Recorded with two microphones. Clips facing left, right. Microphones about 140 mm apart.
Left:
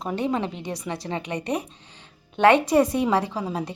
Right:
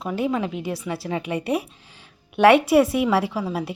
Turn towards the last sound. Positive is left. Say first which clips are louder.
# right 2 dB
turn(degrees=20)  # may be behind; listen again after turning